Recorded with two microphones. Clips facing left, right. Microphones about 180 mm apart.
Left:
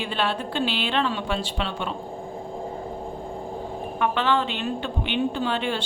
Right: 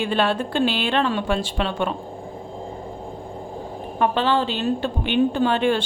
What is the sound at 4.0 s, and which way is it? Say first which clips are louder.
A woman's voice: right 3 dB; 35° right (ahead or behind).